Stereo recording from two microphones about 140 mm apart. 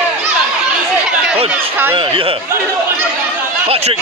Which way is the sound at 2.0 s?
40° right (ahead or behind).